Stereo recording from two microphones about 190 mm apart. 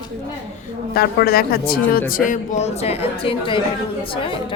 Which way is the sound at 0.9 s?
55° left (ahead or behind).